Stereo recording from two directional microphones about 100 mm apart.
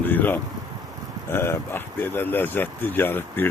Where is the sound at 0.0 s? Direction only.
20° left (ahead or behind).